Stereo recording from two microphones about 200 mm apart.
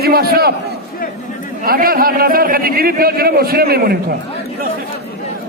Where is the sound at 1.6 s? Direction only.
45° right (ahead or behind).